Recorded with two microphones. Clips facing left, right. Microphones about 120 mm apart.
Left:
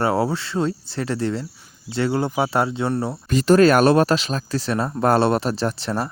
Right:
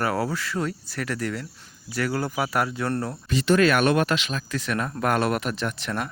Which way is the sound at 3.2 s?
40° left (ahead or behind).